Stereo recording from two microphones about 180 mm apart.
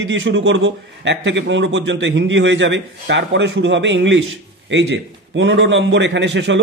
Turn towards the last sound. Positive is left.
turn(degrees=-90)